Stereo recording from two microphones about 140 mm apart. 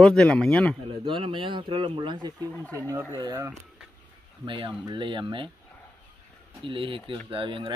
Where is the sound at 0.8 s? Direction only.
35° right (ahead or behind).